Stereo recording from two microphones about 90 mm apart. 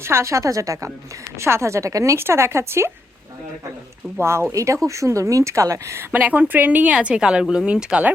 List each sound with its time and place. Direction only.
0.0 s speech: 30° right (ahead or behind)
4.2 s speech: 30° right (ahead or behind)
6.1 s speech: 20° right (ahead or behind)